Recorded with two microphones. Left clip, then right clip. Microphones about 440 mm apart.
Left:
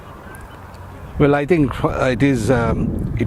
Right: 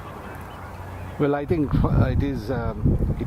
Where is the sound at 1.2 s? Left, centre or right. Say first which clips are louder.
Left 8 dB; left.